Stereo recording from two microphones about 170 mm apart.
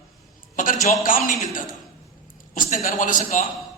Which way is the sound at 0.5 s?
50° left (ahead or behind).